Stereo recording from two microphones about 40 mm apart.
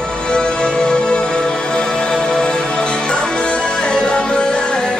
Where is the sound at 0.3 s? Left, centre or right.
Left.